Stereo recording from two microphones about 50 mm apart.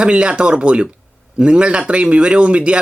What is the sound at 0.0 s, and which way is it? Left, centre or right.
Speech, right.